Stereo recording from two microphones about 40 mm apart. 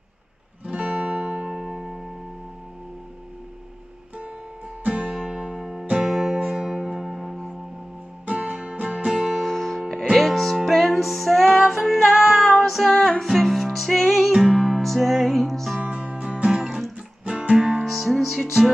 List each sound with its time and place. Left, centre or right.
0.7 s music: centre
4.8 s music: right
5.3 s music: centre
8.3 s music: right
9.4 s music: centre
11.6 s music: centre
14.0 s music: centre
15.8 s music: right
16.6 s music: centre
17.4 s music: right
17.8 s music: centre